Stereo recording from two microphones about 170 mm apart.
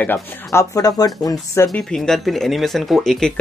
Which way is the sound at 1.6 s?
5° left (ahead or behind).